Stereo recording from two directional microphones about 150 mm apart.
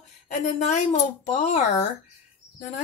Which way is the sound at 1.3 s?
50° left (ahead or behind).